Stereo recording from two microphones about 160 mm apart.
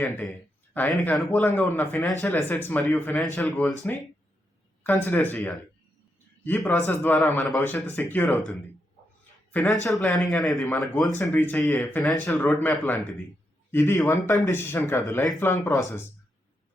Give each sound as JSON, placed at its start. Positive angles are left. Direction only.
{"t": 0.0, "sound": "a man's voice", "side_deg": 5}
{"t": 6.7, "sound": "a man's voice", "side_deg": 10}
{"t": 11.1, "sound": "a man's voice", "side_deg": 15}